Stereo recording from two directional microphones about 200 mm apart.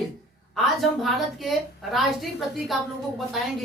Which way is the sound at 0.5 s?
Centre (ahead or behind).